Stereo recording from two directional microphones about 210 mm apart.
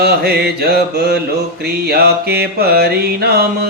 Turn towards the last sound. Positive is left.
turn(degrees=-50)  # may be behind; listen again after turning